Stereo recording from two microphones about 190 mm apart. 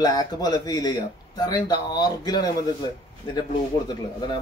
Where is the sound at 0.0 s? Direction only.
20° left (ahead or behind).